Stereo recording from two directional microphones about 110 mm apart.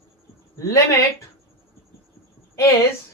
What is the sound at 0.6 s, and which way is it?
Speech, 25° left (ahead or behind).